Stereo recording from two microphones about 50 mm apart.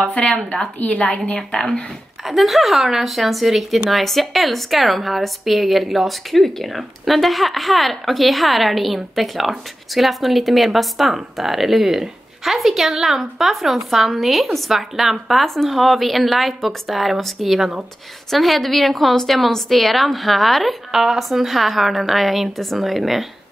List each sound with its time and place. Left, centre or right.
0.7 s a woman's voice: left
2.2 s a woman's voice: centre